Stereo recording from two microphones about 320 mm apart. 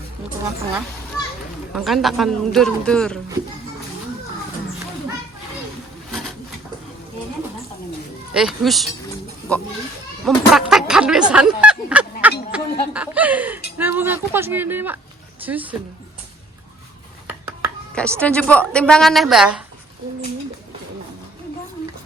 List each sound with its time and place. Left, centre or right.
1.7 s speech: centre
8.3 s speech: centre
12.5 s chuckle: centre
13.7 s speech: centre
17.2 s speech: centre